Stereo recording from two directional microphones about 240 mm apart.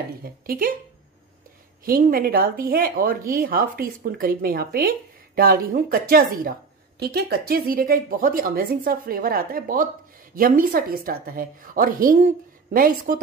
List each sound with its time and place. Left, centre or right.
0.2 s speech: right
1.9 s speech: right